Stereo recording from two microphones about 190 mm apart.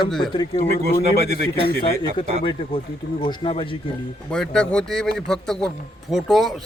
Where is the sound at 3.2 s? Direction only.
25° left (ahead or behind).